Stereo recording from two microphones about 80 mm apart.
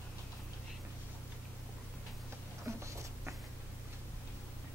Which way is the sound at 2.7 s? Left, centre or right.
Right.